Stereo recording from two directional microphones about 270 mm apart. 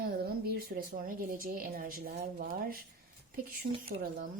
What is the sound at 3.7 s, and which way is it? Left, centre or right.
Speech, right.